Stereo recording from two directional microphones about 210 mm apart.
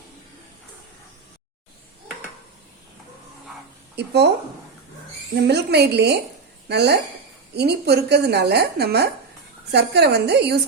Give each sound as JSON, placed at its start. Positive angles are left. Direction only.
{"t": 3.9, "sound": "a woman's voice", "side_deg": -50}
{"t": 5.3, "sound": "a woman's voice", "side_deg": -50}